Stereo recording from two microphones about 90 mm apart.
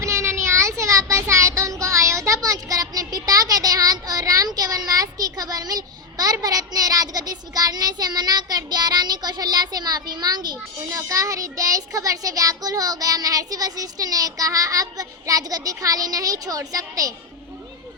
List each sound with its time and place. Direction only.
0.0 s child singing: 30° right (ahead or behind); by 10.6 s 50° right (ahead or behind)
10.9 s a child's voice: 35° right (ahead or behind)